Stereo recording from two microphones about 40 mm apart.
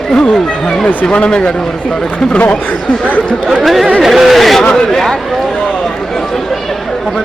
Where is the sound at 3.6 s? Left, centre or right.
Centre.